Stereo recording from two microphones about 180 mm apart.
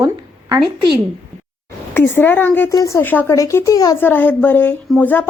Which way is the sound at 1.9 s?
10° left (ahead or behind).